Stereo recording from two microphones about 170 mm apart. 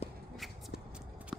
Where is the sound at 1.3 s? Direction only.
Centre (ahead or behind).